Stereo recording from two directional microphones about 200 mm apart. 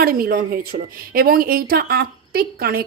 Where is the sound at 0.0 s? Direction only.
50° right (ahead or behind).